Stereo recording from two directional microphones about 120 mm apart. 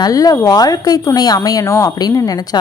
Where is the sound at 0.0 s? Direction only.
30° left (ahead or behind).